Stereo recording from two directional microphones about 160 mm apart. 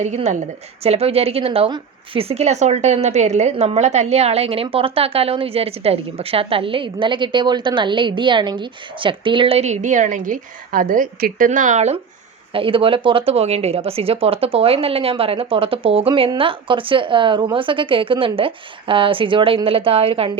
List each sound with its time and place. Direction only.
0.0 s a woman's voice: 45° right (ahead or behind)
12.5 s a woman's voice: 35° right (ahead or behind)